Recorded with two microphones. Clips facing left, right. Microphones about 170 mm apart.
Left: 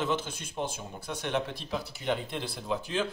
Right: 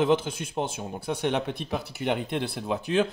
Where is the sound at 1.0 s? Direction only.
60° right (ahead or behind).